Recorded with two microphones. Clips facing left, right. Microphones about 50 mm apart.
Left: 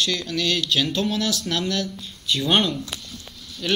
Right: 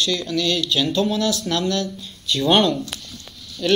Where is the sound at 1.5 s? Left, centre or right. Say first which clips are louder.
Right 3 dB; left.